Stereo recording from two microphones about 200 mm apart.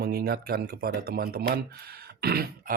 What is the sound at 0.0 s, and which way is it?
Speech, 50° right (ahead or behind).